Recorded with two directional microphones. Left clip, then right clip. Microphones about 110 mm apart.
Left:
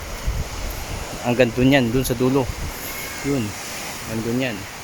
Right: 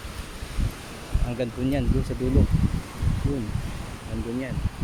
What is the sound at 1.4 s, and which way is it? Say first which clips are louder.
Speech: left 11 dB; 65° left (ahead or behind).